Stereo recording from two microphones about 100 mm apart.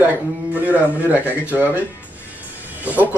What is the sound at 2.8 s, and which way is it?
Speech, 15° right (ahead or behind).